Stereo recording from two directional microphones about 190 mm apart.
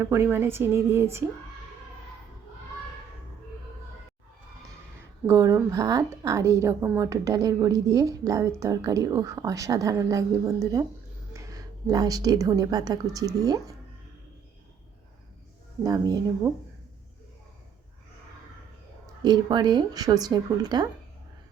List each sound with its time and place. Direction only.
0.0 s a woman's voice: 10° right (ahead or behind)
5.2 s a woman's voice: 15° right (ahead or behind)
15.8 s speech: 20° right (ahead or behind)
19.2 s speech: 20° right (ahead or behind)